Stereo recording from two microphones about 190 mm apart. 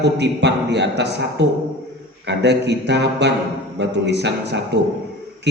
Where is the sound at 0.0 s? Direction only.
65° right (ahead or behind).